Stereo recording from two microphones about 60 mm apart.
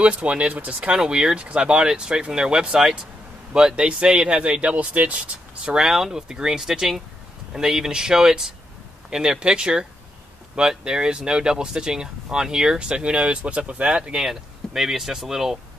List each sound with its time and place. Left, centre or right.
0.0 s speech: right
5.8 s speech: centre